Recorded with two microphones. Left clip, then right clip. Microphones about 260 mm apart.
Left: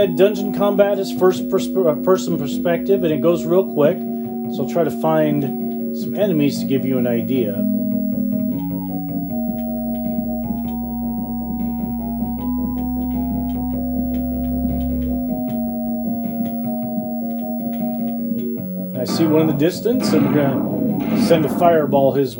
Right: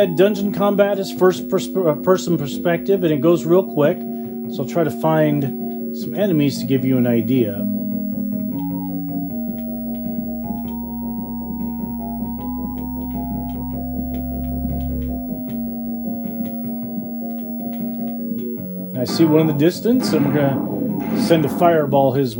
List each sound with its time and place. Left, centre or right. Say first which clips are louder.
0.0 s speech: even; right
19.1 s speech: right 1 dB; right